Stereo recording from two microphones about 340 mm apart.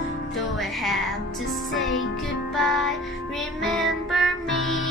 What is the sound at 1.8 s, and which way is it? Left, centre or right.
Music, left.